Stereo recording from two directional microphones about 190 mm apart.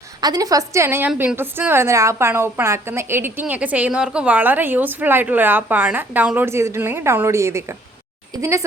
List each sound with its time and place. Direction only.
0.2 s a woman's voice: 20° right (ahead or behind)